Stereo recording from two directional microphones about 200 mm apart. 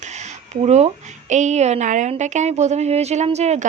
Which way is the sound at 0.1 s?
35° right (ahead or behind).